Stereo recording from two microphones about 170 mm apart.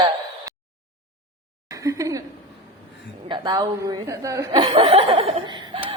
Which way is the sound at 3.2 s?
25° right (ahead or behind).